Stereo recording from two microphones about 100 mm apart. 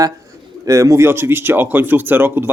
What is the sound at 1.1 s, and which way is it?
Speech, 25° right (ahead or behind).